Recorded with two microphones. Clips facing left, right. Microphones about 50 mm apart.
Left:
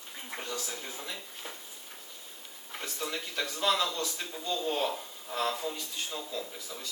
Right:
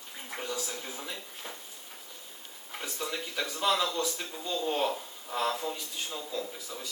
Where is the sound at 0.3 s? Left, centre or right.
Centre.